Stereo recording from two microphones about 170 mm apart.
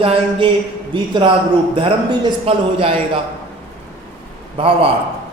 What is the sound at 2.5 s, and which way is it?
Speech, 35° right (ahead or behind).